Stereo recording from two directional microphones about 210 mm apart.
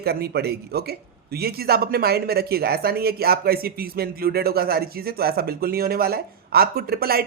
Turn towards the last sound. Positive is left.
turn(degrees=-45)  # may be behind; listen again after turning